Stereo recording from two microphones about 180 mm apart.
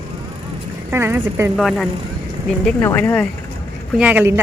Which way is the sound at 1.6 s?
Centre (ahead or behind).